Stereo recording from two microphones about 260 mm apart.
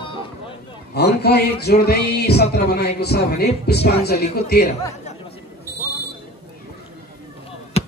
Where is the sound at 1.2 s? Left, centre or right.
Left.